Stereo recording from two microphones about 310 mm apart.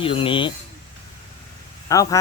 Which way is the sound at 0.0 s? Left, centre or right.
Centre.